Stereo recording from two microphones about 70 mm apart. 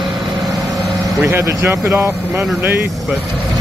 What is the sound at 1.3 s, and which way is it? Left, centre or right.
Speech, right.